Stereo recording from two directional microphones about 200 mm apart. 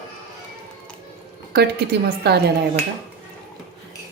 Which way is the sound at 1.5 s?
55° right (ahead or behind).